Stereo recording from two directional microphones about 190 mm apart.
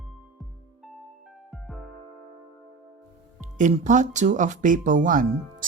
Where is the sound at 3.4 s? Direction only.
40° right (ahead or behind).